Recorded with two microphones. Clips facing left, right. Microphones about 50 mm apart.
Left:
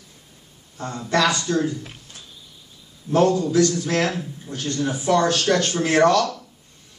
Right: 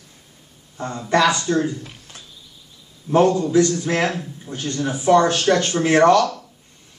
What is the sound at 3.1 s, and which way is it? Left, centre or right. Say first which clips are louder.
Speech: right 2 dB; right.